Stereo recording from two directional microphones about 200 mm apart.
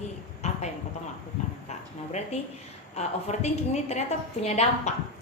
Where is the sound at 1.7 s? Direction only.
35° left (ahead or behind).